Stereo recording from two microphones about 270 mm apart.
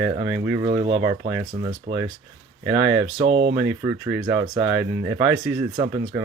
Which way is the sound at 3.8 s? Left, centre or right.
Centre.